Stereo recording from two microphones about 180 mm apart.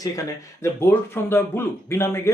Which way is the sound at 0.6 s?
15° left (ahead or behind).